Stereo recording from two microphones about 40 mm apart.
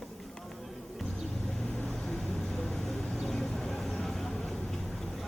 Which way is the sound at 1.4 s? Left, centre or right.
Centre.